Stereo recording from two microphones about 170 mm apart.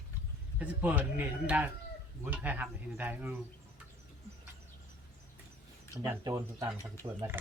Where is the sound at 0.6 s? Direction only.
10° right (ahead or behind).